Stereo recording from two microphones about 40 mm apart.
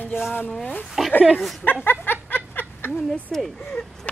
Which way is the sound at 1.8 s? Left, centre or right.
Left.